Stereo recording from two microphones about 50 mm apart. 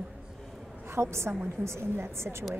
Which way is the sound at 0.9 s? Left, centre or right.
Right.